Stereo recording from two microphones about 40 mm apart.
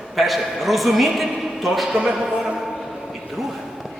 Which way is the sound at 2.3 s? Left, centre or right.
Right.